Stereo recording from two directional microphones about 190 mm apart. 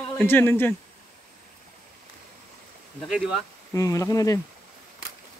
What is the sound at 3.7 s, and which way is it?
Speech, 15° left (ahead or behind).